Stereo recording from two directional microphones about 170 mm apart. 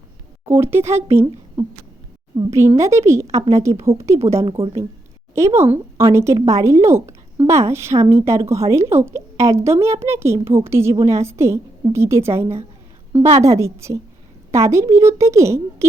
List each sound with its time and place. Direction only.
0.4 s a woman's voice: 15° right (ahead or behind)
13.6 s speech: 15° right (ahead or behind)